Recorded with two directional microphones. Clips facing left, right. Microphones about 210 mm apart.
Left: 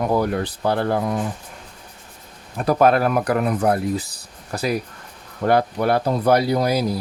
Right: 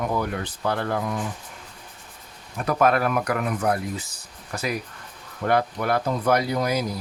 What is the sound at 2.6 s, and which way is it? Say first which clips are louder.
Speech: left 4 dB; 35° left (ahead or behind).